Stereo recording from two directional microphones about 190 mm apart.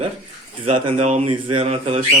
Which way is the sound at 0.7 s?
35° right (ahead or behind).